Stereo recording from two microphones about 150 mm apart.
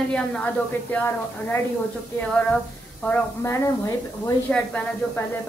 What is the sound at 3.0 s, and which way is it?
Speech, 10° left (ahead or behind).